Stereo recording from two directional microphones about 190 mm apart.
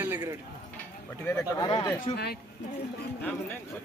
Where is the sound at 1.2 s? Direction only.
15° left (ahead or behind).